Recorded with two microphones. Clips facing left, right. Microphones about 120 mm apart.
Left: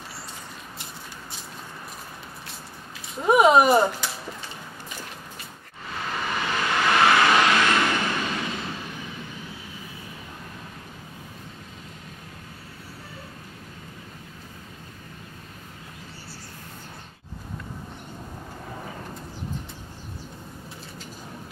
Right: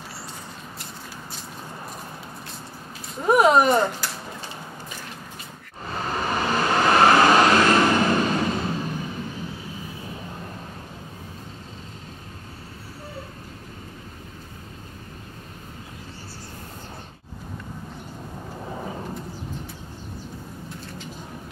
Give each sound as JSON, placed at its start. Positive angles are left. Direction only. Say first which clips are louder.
{"t": 3.2, "sound": "speech", "louder": "even", "side_deg": 0}
{"t": 5.9, "sound": "vehicle", "louder": "right 4 dB", "side_deg": -35}